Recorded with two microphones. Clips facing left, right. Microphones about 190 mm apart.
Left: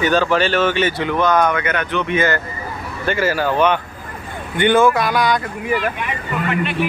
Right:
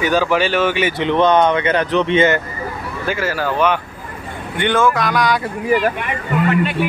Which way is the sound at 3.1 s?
Centre (ahead or behind).